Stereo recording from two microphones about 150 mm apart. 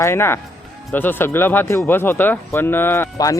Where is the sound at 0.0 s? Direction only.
15° left (ahead or behind).